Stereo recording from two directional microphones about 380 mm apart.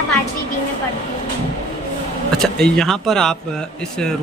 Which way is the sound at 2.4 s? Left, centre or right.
Centre.